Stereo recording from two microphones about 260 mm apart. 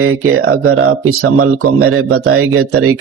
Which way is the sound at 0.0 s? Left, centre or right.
Right.